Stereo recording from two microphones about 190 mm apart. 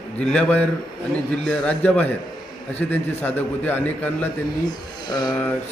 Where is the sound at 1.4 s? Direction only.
5° left (ahead or behind).